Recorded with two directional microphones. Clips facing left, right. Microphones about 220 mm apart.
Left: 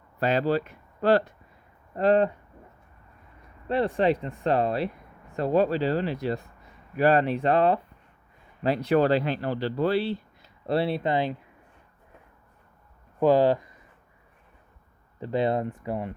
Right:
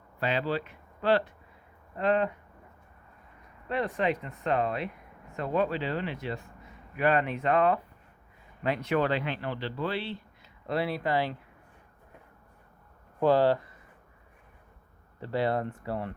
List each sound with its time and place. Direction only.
0.2 s speech: 40° left (ahead or behind)
3.7 s speech: 30° left (ahead or behind)
13.1 s speech: 15° left (ahead or behind)
15.2 s speech: 20° left (ahead or behind)